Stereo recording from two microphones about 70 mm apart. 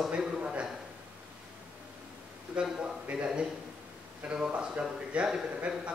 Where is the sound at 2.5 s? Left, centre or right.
Centre.